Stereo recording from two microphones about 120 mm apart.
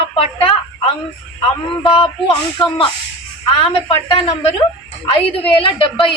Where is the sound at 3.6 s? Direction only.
50° left (ahead or behind).